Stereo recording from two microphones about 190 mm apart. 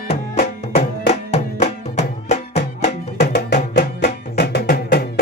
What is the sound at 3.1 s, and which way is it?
Music, 60° left (ahead or behind).